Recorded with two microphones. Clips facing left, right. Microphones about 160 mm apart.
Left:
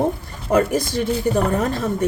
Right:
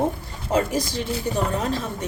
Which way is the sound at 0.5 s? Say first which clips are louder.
Left 5 dB; 50° left (ahead or behind).